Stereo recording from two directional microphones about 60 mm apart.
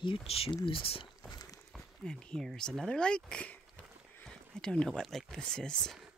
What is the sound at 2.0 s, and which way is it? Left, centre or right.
Speech, centre.